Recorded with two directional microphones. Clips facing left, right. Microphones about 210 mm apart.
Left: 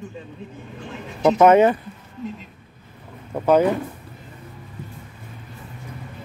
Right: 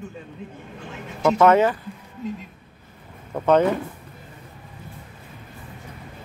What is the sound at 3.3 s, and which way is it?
Speech, 10° left (ahead or behind).